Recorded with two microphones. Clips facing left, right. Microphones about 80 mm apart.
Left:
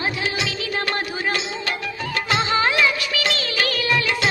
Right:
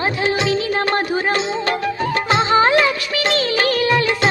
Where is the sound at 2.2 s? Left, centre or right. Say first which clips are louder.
Right 5 dB; right.